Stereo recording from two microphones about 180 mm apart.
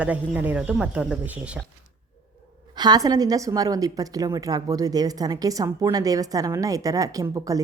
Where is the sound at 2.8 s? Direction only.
20° right (ahead or behind).